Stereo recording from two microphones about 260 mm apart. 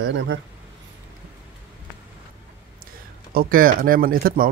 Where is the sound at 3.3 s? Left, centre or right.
Right.